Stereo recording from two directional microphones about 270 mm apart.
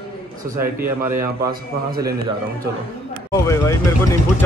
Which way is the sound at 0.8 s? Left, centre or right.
Centre.